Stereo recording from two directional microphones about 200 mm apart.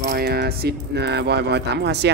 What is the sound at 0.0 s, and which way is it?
Speech, 55° right (ahead or behind).